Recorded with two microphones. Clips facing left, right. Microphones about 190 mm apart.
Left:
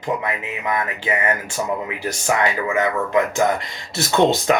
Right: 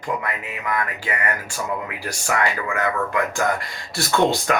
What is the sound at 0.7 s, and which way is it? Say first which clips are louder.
Speech: left 3 dB; 20° left (ahead or behind).